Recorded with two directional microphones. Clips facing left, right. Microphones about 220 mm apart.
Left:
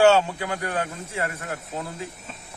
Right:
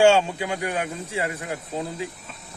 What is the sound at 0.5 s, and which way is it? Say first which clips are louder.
Speech: right 1 dB; 15° right (ahead or behind).